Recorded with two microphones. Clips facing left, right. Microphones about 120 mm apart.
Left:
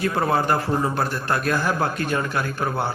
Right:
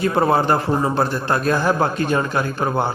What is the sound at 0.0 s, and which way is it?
A man's voice, 30° right (ahead or behind).